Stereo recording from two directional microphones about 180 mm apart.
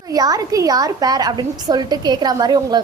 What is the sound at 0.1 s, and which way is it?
A woman's voice, 20° right (ahead or behind).